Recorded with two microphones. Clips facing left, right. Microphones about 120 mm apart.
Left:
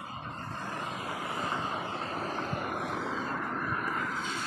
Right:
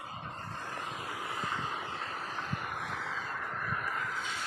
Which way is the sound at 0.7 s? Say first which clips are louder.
Left 4 dB; 55° left (ahead or behind).